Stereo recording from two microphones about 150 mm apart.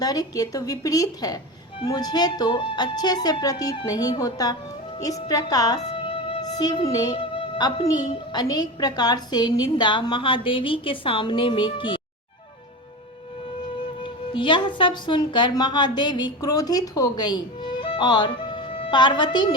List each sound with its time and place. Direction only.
0.0 s a woman's voice: 25° left (ahead or behind)
14.0 s speech: 30° left (ahead or behind)